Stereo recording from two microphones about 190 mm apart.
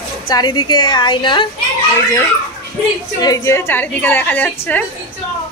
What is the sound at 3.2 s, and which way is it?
A woman's voice, 15° left (ahead or behind).